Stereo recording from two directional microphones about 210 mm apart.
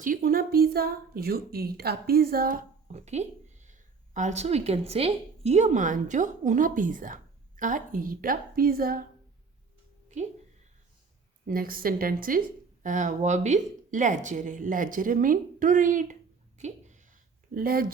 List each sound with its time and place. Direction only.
0.0 s a woman's voice: 40° right (ahead or behind)
11.4 s a woman's voice: 45° right (ahead or behind)
16.6 s a sound: 35° right (ahead or behind)
17.5 s a woman's voice: 45° right (ahead or behind)